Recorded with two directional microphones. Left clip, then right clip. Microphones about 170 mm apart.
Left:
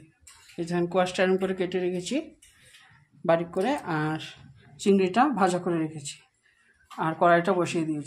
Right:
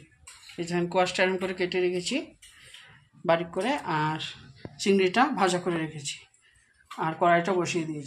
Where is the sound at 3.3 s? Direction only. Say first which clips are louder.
Left 1 dB; 45° left (ahead or behind).